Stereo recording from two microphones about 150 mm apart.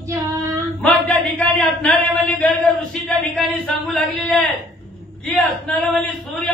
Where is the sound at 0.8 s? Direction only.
5° left (ahead or behind).